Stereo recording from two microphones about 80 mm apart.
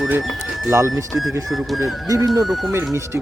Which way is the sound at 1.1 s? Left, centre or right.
Centre.